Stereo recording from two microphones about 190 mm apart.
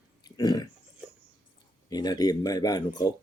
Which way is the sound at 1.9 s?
20° left (ahead or behind).